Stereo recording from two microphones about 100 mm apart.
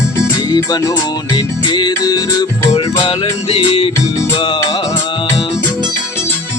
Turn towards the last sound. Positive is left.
turn(degrees=60)  # may be behind; listen again after turning